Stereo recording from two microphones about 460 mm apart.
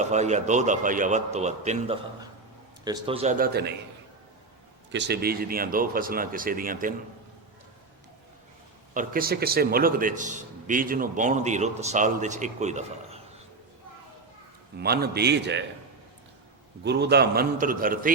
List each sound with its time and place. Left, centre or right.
0.0 s a man's voice: centre
4.9 s speech: right
8.9 s a man's voice: centre
14.8 s speech: right
16.8 s speech: right